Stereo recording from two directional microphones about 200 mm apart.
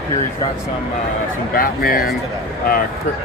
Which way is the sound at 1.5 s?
45° left (ahead or behind).